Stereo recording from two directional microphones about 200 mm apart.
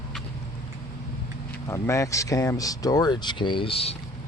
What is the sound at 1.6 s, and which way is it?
Speech, 15° left (ahead or behind).